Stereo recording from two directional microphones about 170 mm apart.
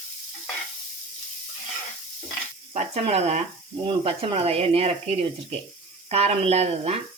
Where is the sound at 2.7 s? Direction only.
40° right (ahead or behind).